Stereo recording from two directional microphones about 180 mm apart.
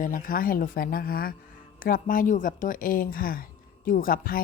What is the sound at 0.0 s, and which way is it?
A woman's voice, 50° left (ahead or behind).